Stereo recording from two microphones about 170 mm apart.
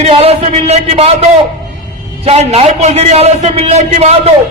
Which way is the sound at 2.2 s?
40° right (ahead or behind).